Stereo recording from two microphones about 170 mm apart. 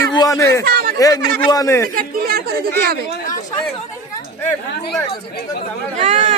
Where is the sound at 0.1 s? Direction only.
20° left (ahead or behind).